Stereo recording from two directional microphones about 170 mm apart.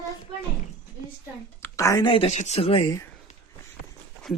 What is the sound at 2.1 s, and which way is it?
Speech, 35° left (ahead or behind).